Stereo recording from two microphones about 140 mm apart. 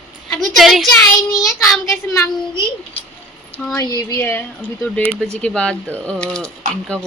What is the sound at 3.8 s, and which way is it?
A woman's voice, 25° left (ahead or behind).